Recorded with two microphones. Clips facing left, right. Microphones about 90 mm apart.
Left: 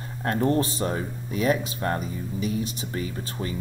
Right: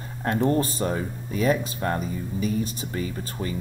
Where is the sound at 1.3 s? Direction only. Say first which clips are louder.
Right 1 dB; 35° right (ahead or behind).